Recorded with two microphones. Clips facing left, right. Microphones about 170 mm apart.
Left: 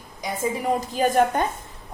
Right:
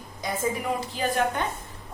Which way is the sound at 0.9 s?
45° left (ahead or behind).